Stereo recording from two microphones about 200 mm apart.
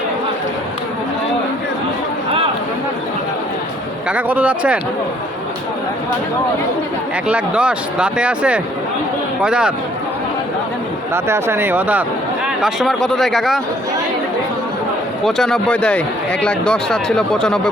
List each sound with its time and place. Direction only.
4.1 s speech: 5° right (ahead or behind)
7.3 s speech: 5° right (ahead or behind)
11.1 s speech: 15° right (ahead or behind)
15.2 s speech: centre (ahead or behind)